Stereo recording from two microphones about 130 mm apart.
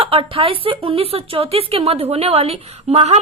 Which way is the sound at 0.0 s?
45° right (ahead or behind).